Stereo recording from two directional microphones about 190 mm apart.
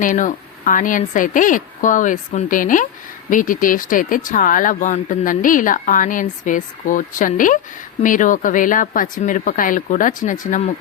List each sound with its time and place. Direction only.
0.0 s speech: 45° left (ahead or behind)